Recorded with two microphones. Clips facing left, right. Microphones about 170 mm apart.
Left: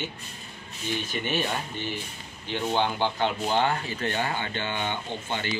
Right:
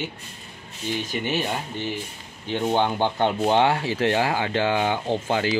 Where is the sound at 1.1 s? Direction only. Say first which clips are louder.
Right 2 dB; 20° right (ahead or behind).